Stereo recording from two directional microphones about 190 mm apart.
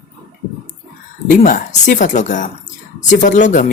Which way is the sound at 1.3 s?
45° left (ahead or behind).